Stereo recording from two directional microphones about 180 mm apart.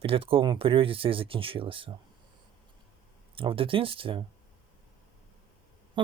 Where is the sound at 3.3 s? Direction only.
30° right (ahead or behind).